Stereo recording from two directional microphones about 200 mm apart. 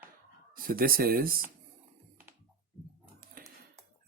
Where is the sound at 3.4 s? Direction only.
45° right (ahead or behind).